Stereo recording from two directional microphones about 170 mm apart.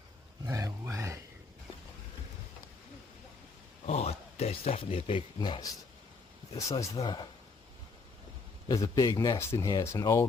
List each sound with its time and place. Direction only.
0.4 s a sound: 20° right (ahead or behind)
3.8 s speech: 40° left (ahead or behind)
8.6 s speech: 20° left (ahead or behind)